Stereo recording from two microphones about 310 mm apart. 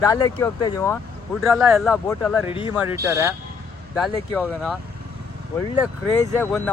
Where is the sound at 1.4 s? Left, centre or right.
Centre.